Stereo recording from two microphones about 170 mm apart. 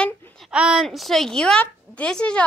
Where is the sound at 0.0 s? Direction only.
5° left (ahead or behind).